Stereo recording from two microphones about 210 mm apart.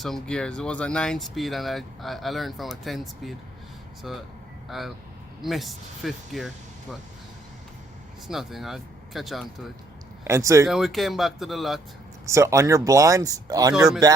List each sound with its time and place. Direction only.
0.0 s speech: 5° left (ahead or behind)
8.3 s speech: centre (ahead or behind)
10.2 s speech: 15° right (ahead or behind)
10.7 s speech: centre (ahead or behind)
12.2 s speech: 15° right (ahead or behind)